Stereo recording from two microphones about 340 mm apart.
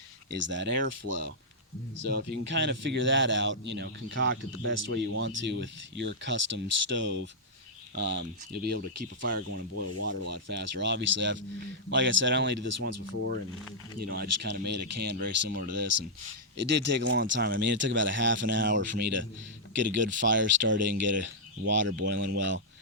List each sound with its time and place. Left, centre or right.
0.3 s a man's voice: right
2.0 s a man's voice: right
14.1 s a man's voice: right